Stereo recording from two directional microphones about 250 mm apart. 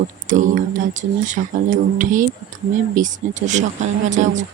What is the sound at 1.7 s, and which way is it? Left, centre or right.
Speech, right.